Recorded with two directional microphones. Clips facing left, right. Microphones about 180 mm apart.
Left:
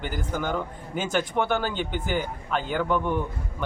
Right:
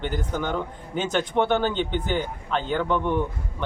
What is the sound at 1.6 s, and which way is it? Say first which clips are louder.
Speech: right 4 dB; 10° left (ahead or behind).